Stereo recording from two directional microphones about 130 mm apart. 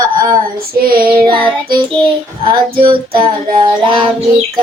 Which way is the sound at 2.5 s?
40° right (ahead or behind).